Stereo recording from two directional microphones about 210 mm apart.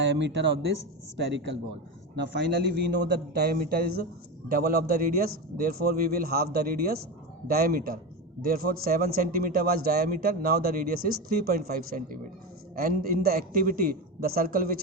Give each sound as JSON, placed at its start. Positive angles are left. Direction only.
{"t": 0.0, "sound": "a man's voice", "side_deg": -55}